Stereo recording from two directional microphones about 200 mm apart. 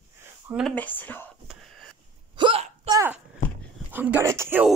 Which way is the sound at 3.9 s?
10° right (ahead or behind).